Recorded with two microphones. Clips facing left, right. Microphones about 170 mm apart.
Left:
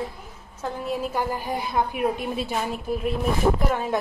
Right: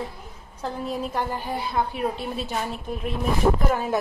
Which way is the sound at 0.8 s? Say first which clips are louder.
Left 2 dB; 10° left (ahead or behind).